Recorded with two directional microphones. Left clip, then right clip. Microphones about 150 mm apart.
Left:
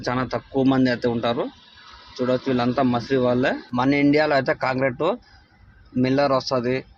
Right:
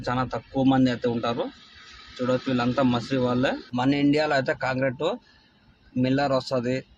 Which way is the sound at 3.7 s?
20° left (ahead or behind).